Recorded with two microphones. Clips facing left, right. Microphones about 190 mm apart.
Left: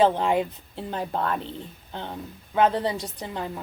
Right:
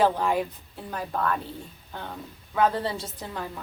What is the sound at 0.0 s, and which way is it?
A woman's voice, 20° left (ahead or behind).